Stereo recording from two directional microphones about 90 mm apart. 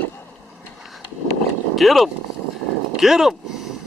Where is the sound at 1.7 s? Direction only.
Centre (ahead or behind).